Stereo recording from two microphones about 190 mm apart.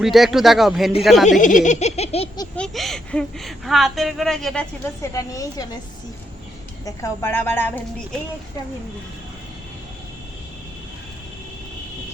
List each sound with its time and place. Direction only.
0.0 s a woman's voice: centre (ahead or behind)
1.3 s giggle: 40° left (ahead or behind); by 2.5 s 25° left (ahead or behind)
2.6 s a woman's voice: centre (ahead or behind)
5.1 s a woman's voice: 20° left (ahead or behind)
6.8 s a woman's voice: 15° left (ahead or behind)